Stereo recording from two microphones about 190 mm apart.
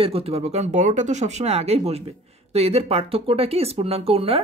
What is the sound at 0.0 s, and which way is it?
Speech, 30° right (ahead or behind).